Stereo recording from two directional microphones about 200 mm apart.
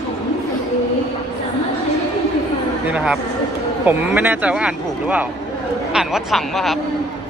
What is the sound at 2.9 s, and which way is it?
Speech, 5° right (ahead or behind).